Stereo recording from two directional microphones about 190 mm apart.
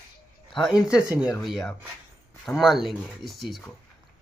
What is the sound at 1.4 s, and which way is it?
Speech, centre (ahead or behind).